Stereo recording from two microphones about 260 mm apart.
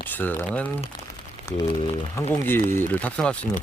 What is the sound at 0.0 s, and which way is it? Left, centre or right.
Speech, centre.